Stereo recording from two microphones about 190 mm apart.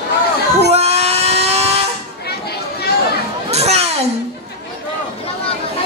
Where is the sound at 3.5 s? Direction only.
35° right (ahead or behind).